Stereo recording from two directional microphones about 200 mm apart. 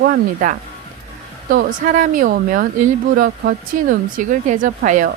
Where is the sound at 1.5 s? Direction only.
40° right (ahead or behind).